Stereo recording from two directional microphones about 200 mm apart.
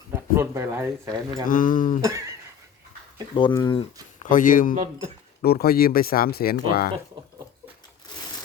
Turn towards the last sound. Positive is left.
turn(degrees=50)  # may be behind; listen again after turning